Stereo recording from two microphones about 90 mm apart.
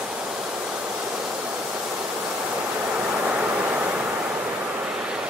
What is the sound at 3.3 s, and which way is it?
Vehicle, 15° right (ahead or behind).